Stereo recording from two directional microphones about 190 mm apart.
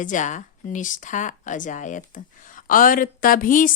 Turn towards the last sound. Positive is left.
turn(degrees=45)  # may be behind; listen again after turning